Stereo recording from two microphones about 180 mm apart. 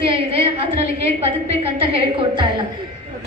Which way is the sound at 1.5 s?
35° right (ahead or behind).